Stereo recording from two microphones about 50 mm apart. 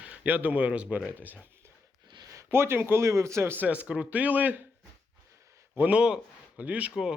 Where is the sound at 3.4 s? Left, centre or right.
Right.